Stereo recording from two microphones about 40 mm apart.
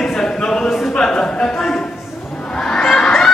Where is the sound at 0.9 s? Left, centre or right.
Centre.